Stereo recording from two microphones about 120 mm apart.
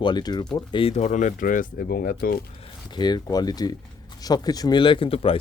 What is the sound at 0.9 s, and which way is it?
Speech, 85° left.